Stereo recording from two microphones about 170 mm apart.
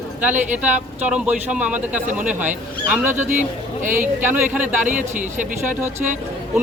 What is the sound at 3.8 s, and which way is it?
Speech, 50° right (ahead or behind).